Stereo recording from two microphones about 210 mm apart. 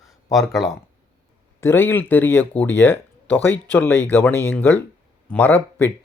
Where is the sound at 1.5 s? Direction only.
10° left (ahead or behind).